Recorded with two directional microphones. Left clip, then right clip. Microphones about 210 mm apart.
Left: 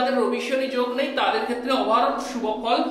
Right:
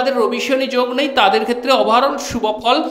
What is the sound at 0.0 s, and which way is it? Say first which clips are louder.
A woman's voice: right 6 dB; 50° right (ahead or behind).